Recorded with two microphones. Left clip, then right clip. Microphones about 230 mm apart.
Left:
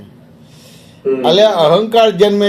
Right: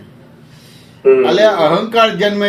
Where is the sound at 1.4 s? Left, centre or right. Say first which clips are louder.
Left 1 dB; left.